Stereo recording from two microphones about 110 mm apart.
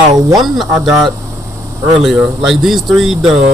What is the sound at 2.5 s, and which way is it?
Speech, centre (ahead or behind).